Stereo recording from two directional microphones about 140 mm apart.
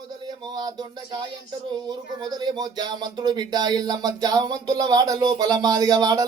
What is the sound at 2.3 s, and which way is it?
Speech, 30° right (ahead or behind).